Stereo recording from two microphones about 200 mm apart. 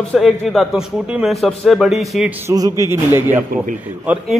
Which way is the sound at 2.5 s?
15° right (ahead or behind).